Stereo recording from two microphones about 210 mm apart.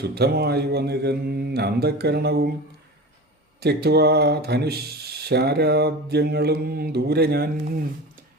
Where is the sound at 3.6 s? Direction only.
50° right (ahead or behind).